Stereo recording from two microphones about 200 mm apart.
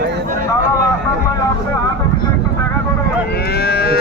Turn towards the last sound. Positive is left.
turn(degrees=50)  # may be behind; listen again after turning